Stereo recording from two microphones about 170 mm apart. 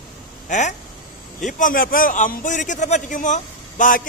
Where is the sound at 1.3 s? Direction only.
50° left (ahead or behind).